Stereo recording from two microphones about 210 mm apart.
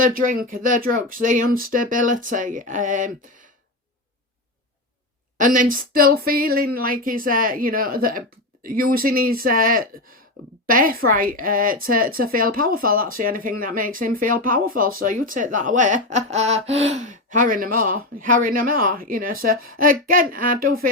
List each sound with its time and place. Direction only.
0.0 s a woman's voice: 40° right (ahead or behind)
5.4 s a woman's voice: 40° right (ahead or behind)